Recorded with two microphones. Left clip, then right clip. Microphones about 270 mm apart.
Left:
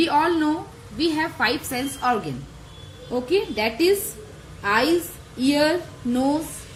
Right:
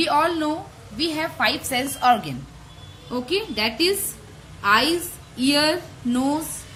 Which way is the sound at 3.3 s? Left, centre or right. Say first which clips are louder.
Left 1 dB; right.